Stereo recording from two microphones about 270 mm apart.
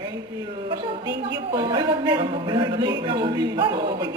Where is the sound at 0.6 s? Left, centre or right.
Centre.